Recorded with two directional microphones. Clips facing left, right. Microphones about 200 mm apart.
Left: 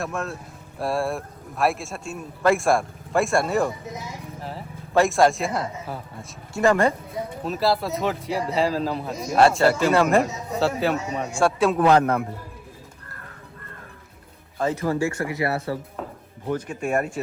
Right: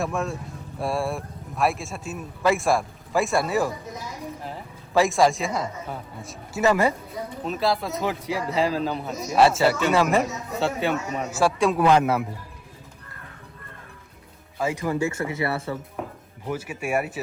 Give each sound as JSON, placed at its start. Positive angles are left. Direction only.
{"t": 0.0, "sound": "speech", "side_deg": 0}
{"t": 14.6, "sound": "speech", "side_deg": -10}
{"t": 14.9, "sound": "speech", "side_deg": -20}
{"t": 16.0, "sound": "a sound", "side_deg": -15}
{"t": 16.5, "sound": "speech", "side_deg": -5}